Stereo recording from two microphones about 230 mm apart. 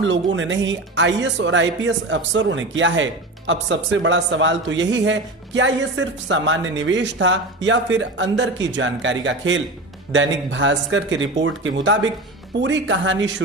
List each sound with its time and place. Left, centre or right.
0.0 s speech: right